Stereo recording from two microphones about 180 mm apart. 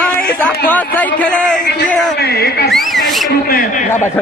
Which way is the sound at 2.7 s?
Centre (ahead or behind).